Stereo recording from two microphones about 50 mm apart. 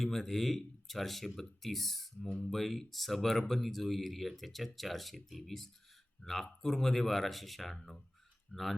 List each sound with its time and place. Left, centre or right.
0.0 s speech: centre